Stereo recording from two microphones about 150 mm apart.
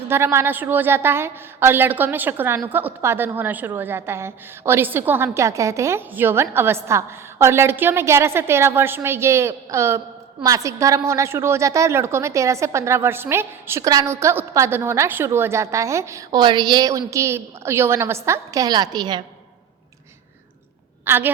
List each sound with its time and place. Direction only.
0.1 s a woman's voice: 15° right (ahead or behind)
21.0 s a woman's voice: 15° right (ahead or behind)